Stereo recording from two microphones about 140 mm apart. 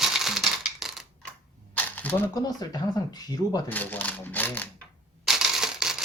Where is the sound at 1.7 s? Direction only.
15° left (ahead or behind).